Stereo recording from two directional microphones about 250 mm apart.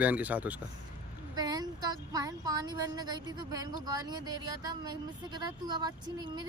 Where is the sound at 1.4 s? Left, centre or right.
Centre.